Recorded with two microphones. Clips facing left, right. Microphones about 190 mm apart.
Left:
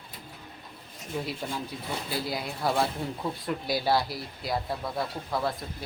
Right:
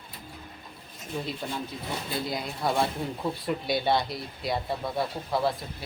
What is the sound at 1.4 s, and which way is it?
Speech, 5° left (ahead or behind).